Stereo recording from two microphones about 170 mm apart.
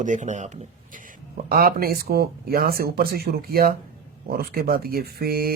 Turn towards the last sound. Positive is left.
turn(degrees=-65)  # may be behind; listen again after turning